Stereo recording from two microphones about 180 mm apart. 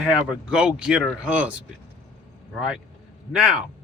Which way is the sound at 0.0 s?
5° right (ahead or behind).